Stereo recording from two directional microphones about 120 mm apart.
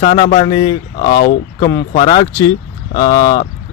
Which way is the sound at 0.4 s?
35° left (ahead or behind).